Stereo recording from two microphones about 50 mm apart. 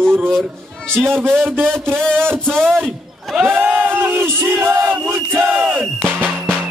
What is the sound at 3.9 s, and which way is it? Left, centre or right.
Battle cry, right.